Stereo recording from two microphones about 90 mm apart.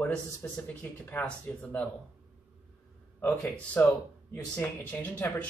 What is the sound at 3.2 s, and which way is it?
Speech, 20° left (ahead or behind).